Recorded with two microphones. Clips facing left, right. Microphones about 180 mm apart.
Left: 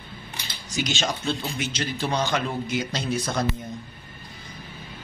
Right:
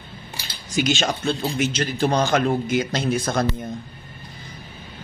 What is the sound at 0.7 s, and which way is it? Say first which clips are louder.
A man's voice: right 5 dB; 55° right (ahead or behind).